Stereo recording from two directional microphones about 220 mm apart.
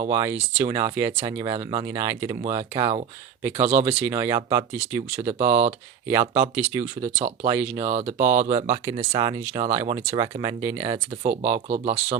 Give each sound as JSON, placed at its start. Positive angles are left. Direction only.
{"t": 0.1, "sound": "speech", "side_deg": -10}
{"t": 3.7, "sound": "speech", "side_deg": -10}
{"t": 5.2, "sound": "speech", "side_deg": -25}
{"t": 5.5, "sound": "speech", "side_deg": -10}
{"t": 7.9, "sound": "speech", "side_deg": -30}
{"t": 8.2, "sound": "speech", "side_deg": -10}
{"t": 8.5, "sound": "speech", "side_deg": -30}
{"t": 9.0, "sound": "speech", "side_deg": -20}
{"t": 10.8, "sound": "speech", "side_deg": -25}